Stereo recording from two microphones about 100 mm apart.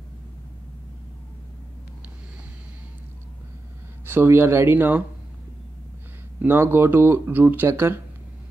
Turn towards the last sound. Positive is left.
turn(degrees=-25)  # may be behind; listen again after turning